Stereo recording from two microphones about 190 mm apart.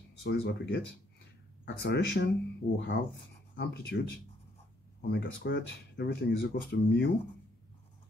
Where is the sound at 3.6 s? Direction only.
60° left (ahead or behind).